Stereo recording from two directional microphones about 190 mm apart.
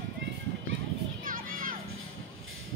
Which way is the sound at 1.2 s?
45° right (ahead or behind).